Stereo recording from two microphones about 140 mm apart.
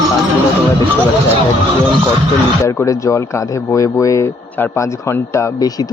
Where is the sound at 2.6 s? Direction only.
20° left (ahead or behind).